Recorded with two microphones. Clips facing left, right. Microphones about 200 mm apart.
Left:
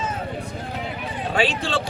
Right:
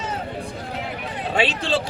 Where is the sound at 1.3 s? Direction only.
25° right (ahead or behind).